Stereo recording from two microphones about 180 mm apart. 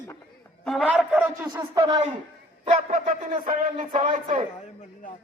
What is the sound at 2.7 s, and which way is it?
Speech, 45° right (ahead or behind).